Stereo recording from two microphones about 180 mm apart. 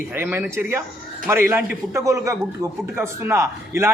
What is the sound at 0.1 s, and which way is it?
A man's voice, 10° right (ahead or behind).